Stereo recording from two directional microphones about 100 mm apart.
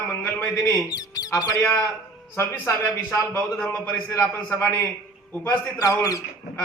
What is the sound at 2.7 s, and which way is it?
Speech, 25° left (ahead or behind).